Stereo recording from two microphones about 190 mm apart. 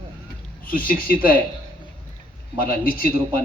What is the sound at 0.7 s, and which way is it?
Speech, 50° left (ahead or behind).